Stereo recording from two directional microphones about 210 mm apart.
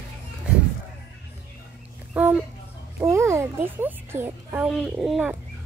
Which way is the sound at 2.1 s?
5° right (ahead or behind).